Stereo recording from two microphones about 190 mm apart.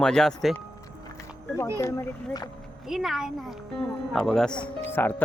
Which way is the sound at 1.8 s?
15° left (ahead or behind).